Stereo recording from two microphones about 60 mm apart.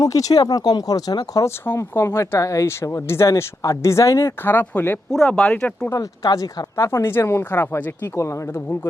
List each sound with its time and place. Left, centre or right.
0.0 s speech: left
1.5 s speech: left
1.8 s speech: left
3.6 s speech: left
4.4 s speech: left
5.1 s speech: centre
5.4 s speech: left
5.9 s speech: left